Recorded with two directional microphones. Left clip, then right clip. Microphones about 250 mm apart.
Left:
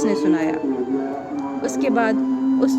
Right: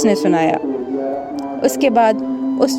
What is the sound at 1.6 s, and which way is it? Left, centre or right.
Speech, right.